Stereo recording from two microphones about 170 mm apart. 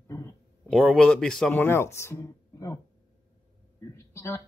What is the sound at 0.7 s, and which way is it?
Speech, centre (ahead or behind).